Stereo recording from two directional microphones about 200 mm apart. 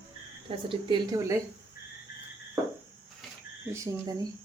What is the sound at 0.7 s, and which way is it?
Speech, 20° right (ahead or behind).